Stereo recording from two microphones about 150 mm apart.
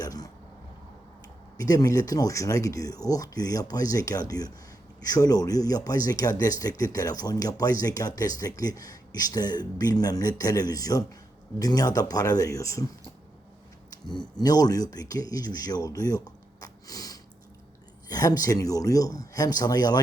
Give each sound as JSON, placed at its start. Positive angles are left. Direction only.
{"t": 0.0, "sound": "throat clearing", "side_deg": 25}
{"t": 1.5, "sound": "speech", "side_deg": 25}
{"t": 14.1, "sound": "speech", "side_deg": 30}